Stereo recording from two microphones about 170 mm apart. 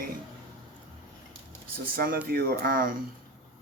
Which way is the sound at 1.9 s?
60° right (ahead or behind).